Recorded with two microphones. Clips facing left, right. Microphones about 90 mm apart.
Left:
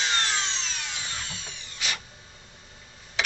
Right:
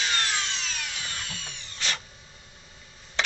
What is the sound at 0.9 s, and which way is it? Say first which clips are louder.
Tools: even; 20° left (ahead or behind).